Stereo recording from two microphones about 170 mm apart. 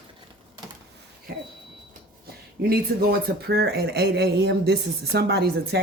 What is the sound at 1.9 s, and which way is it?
Speech, 65° right (ahead or behind).